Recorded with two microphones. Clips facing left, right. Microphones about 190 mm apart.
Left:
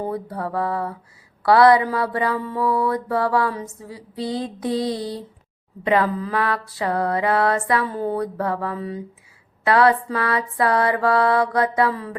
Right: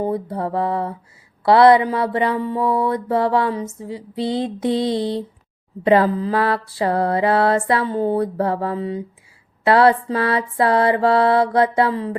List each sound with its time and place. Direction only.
0.0 s mantra: 20° right (ahead or behind)